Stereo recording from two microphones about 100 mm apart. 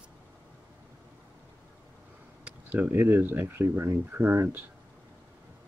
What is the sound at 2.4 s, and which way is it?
Speech, 15° right (ahead or behind).